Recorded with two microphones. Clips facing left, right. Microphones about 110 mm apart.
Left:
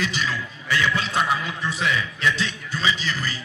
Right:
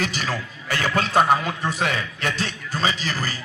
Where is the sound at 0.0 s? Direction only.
45° right (ahead or behind).